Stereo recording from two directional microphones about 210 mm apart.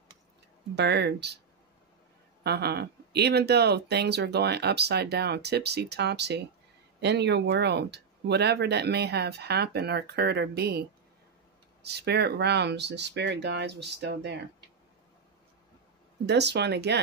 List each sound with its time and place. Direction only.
0.7 s speech: 50° right (ahead or behind)
2.4 s speech: 50° right (ahead or behind)
11.8 s speech: 50° right (ahead or behind)
16.3 s speech: 55° right (ahead or behind)